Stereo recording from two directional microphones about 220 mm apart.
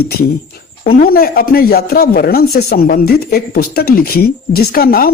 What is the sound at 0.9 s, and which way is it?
Speech, 45° left (ahead or behind).